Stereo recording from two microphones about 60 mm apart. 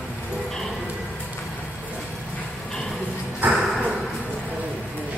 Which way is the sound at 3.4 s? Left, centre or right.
Right.